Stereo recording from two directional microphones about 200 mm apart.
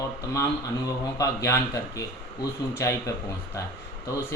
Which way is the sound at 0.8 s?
15° left (ahead or behind).